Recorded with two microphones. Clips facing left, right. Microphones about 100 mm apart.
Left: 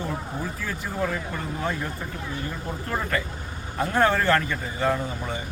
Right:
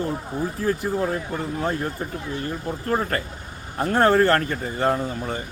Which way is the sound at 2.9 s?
45° right (ahead or behind).